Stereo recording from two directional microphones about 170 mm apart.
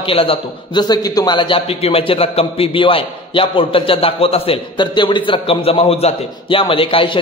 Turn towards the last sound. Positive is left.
turn(degrees=30)  # may be behind; listen again after turning